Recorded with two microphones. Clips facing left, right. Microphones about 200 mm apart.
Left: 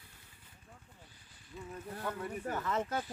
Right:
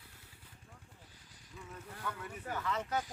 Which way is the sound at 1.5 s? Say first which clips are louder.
Left 5 dB; 35° left (ahead or behind).